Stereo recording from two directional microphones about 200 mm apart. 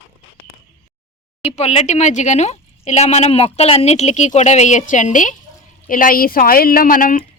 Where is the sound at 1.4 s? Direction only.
30° left (ahead or behind).